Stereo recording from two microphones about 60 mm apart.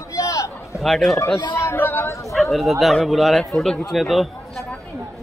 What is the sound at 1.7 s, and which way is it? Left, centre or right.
Chatter, left.